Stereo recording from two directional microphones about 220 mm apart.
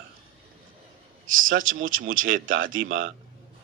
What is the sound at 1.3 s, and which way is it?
Speech, 65° right (ahead or behind).